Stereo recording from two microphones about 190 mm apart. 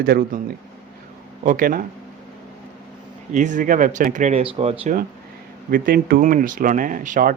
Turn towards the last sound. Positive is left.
turn(degrees=-45)  # may be behind; listen again after turning